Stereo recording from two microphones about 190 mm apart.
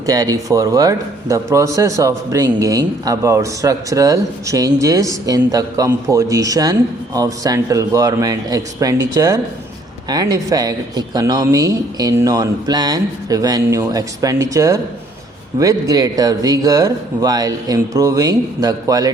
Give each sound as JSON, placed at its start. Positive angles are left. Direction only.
{"t": 0.0, "sound": "speech", "side_deg": -20}